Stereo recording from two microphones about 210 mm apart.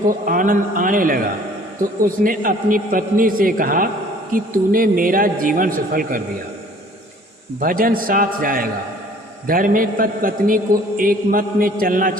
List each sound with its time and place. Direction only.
0.1 s a man's voice: 40° right (ahead or behind)
7.6 s a man's voice: 40° right (ahead or behind)